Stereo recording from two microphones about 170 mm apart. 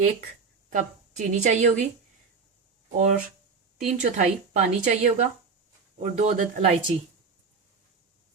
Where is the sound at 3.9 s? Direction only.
45° right (ahead or behind).